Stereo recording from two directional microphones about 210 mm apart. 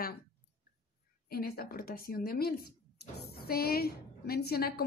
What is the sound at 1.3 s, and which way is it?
Speech, 45° left (ahead or behind).